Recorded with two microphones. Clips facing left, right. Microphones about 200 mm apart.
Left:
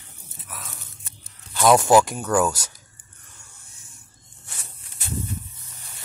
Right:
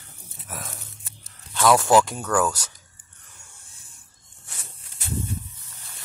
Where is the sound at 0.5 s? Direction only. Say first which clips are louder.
Right 4 dB; 45° right (ahead or behind).